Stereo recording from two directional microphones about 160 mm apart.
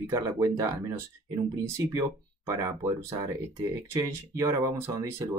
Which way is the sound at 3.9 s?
20° right (ahead or behind).